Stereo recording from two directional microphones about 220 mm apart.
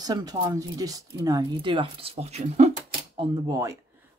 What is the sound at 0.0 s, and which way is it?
Speech, 15° right (ahead or behind).